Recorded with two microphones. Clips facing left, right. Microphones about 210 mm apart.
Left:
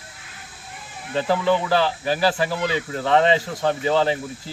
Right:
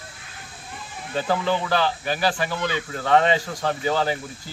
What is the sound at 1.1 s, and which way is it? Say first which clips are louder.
Speech: left 3 dB; 25° left (ahead or behind).